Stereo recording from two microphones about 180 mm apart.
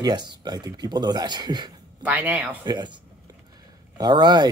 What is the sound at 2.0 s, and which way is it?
Speech, 10° right (ahead or behind).